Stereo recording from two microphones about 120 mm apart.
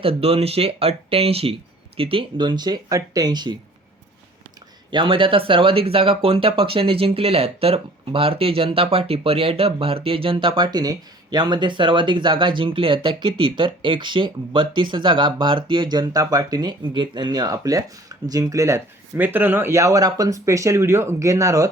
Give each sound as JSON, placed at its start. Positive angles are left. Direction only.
{"t": 0.0, "sound": "speech", "side_deg": -55}
{"t": 4.9, "sound": "speech", "side_deg": -45}